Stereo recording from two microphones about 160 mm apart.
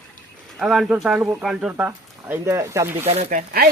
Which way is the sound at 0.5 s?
Centre (ahead or behind).